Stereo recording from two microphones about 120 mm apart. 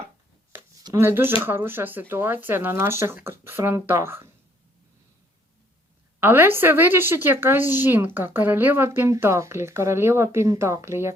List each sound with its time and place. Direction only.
0.9 s a woman's voice: 20° right (ahead or behind)
6.1 s a woman's voice: 15° right (ahead or behind)